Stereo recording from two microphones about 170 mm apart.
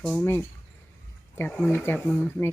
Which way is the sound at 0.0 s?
5° left (ahead or behind).